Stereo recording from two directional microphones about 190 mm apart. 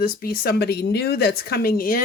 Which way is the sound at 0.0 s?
50° left (ahead or behind).